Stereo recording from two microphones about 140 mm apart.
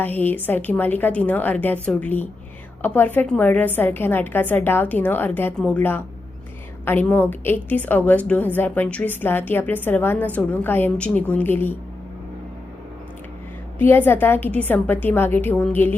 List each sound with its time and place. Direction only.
0.0 s a woman's voice: 15° left (ahead or behind)
13.7 s a woman's voice: 15° left (ahead or behind)